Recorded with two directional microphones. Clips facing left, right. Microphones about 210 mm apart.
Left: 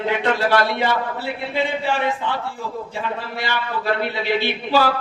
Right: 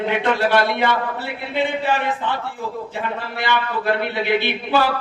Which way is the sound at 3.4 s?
55° right (ahead or behind).